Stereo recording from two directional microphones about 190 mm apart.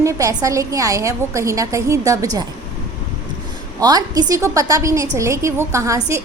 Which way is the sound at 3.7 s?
20° right (ahead or behind).